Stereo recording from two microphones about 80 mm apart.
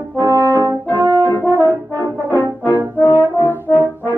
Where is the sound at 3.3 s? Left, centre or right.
Left.